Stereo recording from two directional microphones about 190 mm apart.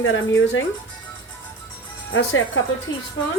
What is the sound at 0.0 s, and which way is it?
Speech, 90° left.